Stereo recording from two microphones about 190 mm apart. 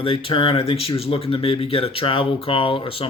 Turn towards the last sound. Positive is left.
turn(degrees=30)  # may be behind; listen again after turning